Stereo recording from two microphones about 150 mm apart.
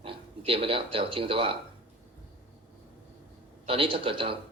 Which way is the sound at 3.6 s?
35° right (ahead or behind).